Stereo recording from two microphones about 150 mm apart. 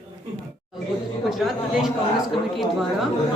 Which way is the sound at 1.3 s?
Centre (ahead or behind).